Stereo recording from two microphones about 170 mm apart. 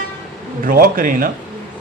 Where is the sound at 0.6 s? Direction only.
55° right (ahead or behind).